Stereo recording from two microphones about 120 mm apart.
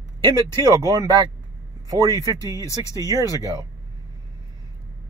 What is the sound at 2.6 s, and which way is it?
Speech, 25° left (ahead or behind).